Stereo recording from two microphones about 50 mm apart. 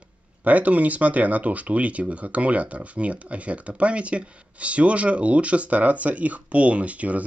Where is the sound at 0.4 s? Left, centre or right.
Right.